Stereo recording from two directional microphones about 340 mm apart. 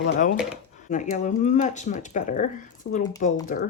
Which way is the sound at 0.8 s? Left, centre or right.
Left.